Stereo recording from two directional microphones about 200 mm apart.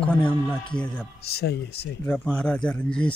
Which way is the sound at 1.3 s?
55° left (ahead or behind).